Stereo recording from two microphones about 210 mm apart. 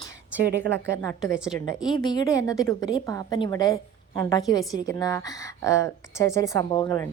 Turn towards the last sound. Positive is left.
turn(degrees=20)  # may be behind; listen again after turning